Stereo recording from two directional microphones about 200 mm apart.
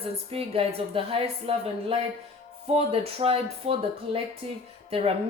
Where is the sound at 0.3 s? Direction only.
30° right (ahead or behind).